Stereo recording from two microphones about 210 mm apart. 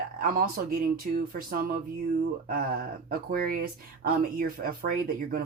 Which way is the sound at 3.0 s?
45° right (ahead or behind).